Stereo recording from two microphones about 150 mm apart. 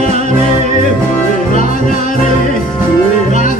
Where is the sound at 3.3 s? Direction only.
60° left (ahead or behind).